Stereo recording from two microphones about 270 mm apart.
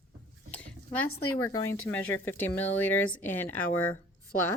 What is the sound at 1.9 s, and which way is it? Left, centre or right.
Speech, centre.